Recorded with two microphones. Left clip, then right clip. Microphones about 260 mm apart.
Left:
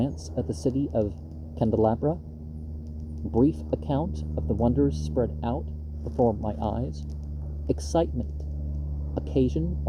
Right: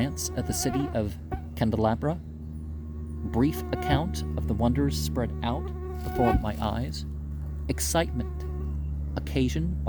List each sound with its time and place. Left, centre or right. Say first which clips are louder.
0.0 s speech: left 1 dB; right
3.3 s speech: left 3 dB; right